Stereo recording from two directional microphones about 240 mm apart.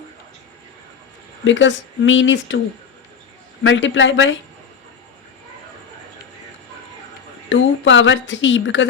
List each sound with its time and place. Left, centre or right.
1.5 s speech: left
3.6 s speech: left
7.5 s speech: left